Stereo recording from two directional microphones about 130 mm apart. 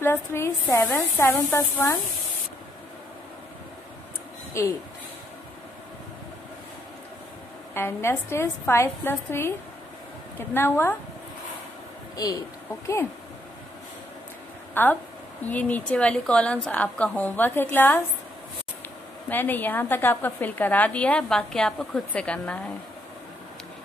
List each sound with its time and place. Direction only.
0.0 s a woman's voice: 20° left (ahead or behind)
4.6 s a woman's voice: 20° left (ahead or behind)
7.7 s a woman's voice: 20° left (ahead or behind)
10.5 s a woman's voice: 15° left (ahead or behind)
12.2 s a woman's voice: 25° left (ahead or behind)
14.7 s a woman's voice: 15° left (ahead or behind)
19.2 s a woman's voice: 15° left (ahead or behind)